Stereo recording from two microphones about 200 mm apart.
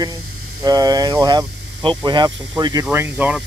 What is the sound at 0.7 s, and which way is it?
Speech, 20° right (ahead or behind).